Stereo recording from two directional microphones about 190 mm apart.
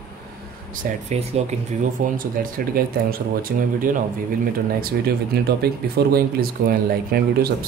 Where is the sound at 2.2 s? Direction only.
50° right (ahead or behind).